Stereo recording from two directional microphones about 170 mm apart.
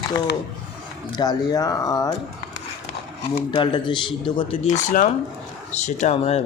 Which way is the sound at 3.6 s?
25° left (ahead or behind).